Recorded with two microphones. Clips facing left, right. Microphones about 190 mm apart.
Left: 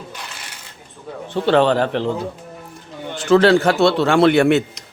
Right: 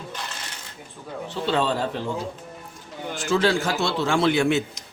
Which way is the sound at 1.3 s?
70° left (ahead or behind).